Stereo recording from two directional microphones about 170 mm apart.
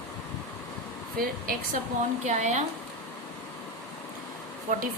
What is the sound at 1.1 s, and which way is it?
Speech, 55° right (ahead or behind).